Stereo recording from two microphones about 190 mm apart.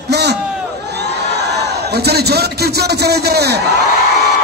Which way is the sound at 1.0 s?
60° right (ahead or behind).